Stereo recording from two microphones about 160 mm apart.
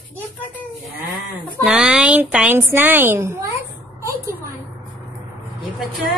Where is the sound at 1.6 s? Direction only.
5° right (ahead or behind).